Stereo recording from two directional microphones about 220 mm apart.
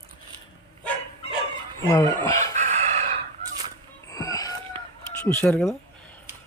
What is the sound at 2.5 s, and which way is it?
Chicken, 30° right (ahead or behind).